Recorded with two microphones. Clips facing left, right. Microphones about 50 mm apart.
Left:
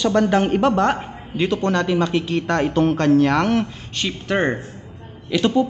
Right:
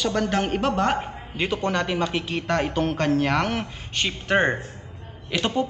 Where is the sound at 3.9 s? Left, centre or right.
Right.